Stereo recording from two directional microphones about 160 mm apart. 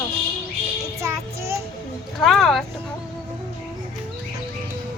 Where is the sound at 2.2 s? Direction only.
Centre (ahead or behind).